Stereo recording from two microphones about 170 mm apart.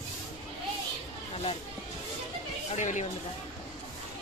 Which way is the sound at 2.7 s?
45° left (ahead or behind).